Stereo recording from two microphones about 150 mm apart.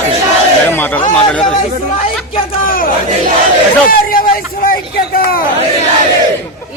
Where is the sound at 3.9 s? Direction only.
75° left (ahead or behind).